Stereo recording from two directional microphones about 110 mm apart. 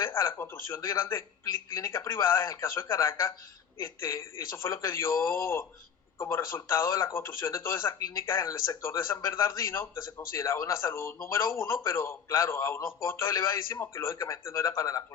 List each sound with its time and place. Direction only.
0.0 s speech: 20° left (ahead or behind)
2.0 s a man's voice: 25° left (ahead or behind)
8.4 s speech: 35° left (ahead or behind)
8.8 s a man's voice: 25° left (ahead or behind)